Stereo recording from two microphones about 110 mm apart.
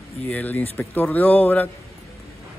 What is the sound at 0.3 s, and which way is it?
Speech, 15° left (ahead or behind).